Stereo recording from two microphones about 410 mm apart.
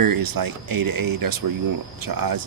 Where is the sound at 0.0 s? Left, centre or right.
Right.